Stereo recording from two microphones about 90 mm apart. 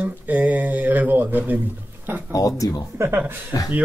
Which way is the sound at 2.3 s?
40° left (ahead or behind).